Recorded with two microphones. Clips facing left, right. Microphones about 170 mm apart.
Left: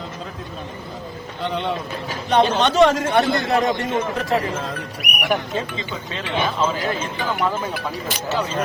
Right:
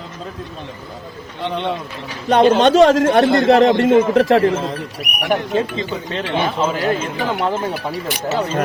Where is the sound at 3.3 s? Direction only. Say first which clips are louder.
Right 8 dB; 80° right.